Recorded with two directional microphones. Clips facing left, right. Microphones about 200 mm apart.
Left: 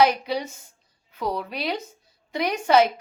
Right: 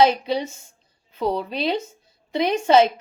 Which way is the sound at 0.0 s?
25° right (ahead or behind).